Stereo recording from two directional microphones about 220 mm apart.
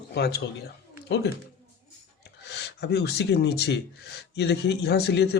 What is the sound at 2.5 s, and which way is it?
Speech, 50° left (ahead or behind).